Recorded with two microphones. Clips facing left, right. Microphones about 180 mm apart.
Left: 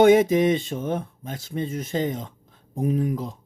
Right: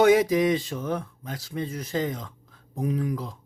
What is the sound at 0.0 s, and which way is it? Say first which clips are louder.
Speech: left 3 dB; 25° left (ahead or behind).